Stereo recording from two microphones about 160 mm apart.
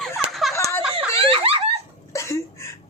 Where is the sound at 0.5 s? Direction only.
20° left (ahead or behind).